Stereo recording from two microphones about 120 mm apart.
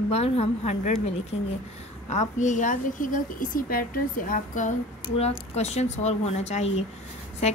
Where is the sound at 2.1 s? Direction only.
85° left.